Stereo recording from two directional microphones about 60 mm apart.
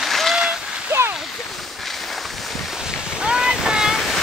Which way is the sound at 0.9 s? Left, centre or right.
Right.